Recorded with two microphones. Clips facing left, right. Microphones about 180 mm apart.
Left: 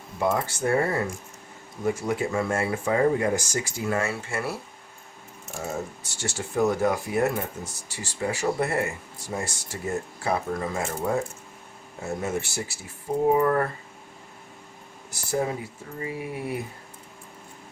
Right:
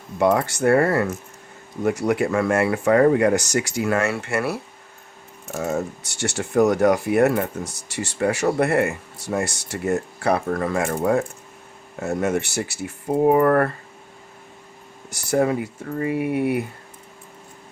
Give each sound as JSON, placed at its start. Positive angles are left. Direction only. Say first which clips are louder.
{"t": 0.2, "sound": "speech", "louder": "right 6 dB", "side_deg": -75}
{"t": 15.1, "sound": "speech", "louder": "right 7 dB", "side_deg": -70}